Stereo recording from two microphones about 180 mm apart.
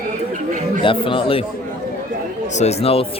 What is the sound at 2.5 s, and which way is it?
Speech, 35° left (ahead or behind).